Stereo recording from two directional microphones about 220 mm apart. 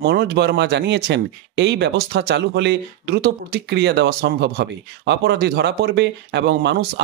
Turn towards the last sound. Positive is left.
turn(degrees=-50)  # may be behind; listen again after turning